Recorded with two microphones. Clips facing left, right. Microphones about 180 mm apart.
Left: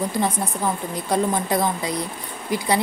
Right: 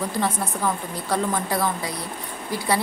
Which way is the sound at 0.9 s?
15° left (ahead or behind).